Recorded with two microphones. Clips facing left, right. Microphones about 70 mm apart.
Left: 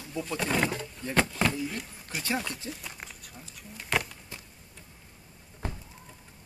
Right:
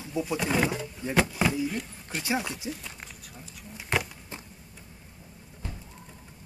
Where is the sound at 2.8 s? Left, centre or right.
Centre.